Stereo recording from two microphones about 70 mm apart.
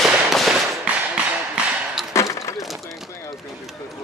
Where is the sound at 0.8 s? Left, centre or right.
Centre.